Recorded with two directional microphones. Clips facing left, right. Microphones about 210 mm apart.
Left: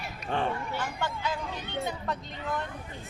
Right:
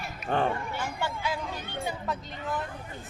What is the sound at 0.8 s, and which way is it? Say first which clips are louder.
Speech: even; 10° right (ahead or behind).